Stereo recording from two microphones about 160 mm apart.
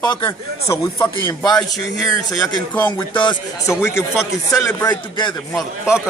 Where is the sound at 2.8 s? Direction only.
10° left (ahead or behind).